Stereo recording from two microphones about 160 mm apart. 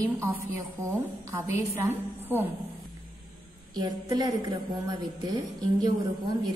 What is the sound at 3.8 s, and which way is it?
A woman's voice, 25° right (ahead or behind).